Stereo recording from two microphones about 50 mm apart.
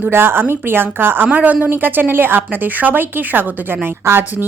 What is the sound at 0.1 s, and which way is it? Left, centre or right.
A woman's voice, right.